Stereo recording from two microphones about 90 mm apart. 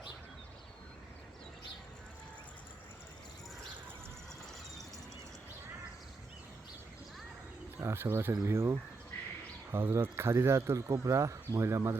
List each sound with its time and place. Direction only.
7.8 s speech: 30° right (ahead or behind)